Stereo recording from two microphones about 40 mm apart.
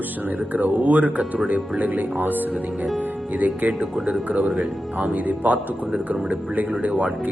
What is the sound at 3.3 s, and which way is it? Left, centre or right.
Speech, right.